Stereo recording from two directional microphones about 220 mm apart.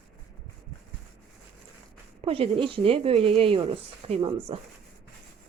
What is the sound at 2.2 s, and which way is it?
Speech, 25° right (ahead or behind).